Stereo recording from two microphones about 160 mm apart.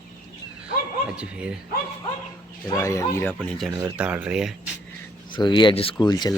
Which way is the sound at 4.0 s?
10° right (ahead or behind).